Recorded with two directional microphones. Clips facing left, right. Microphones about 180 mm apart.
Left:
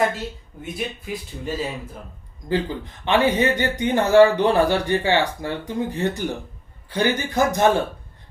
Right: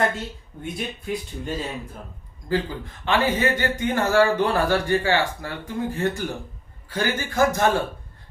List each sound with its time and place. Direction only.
0.6 s speech: centre (ahead or behind)
2.5 s speech: 20° left (ahead or behind)